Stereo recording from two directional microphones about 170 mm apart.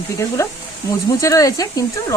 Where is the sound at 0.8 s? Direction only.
20° left (ahead or behind).